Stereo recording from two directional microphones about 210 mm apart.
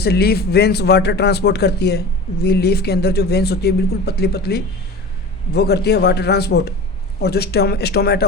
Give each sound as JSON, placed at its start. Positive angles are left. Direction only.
{"t": 0.0, "sound": "speech", "side_deg": 50}